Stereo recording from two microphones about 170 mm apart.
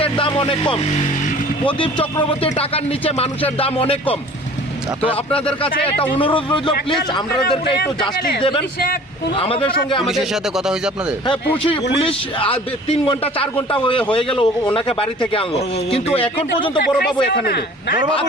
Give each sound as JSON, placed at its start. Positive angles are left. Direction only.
{"t": 0.0, "sound": "a man's voice", "side_deg": 30}
{"t": 8.4, "sound": "a man's voice", "side_deg": 30}
{"t": 10.0, "sound": "speech", "side_deg": 0}
{"t": 11.6, "sound": "a man's voice", "side_deg": 35}
{"t": 17.0, "sound": "a man's voice", "side_deg": 70}